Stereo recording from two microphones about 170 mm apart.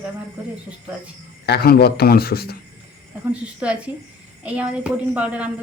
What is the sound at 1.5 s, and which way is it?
A man's voice, 65° left (ahead or behind).